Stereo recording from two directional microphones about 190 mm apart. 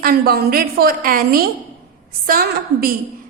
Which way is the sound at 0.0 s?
55° right (ahead or behind).